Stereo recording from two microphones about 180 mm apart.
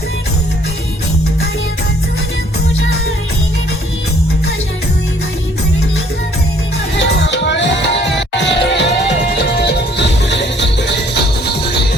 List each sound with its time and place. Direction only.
6.9 s music: 80° left